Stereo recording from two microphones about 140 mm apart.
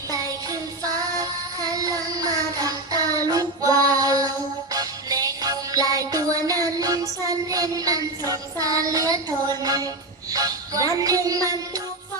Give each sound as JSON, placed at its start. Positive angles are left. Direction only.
{"t": 0.1, "sound": "music", "side_deg": -25}
{"t": 1.2, "sound": "child singing", "side_deg": -25}
{"t": 4.7, "sound": "music", "side_deg": -25}